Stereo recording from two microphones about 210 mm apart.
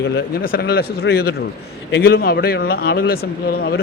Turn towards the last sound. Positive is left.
turn(degrees=45)  # may be behind; listen again after turning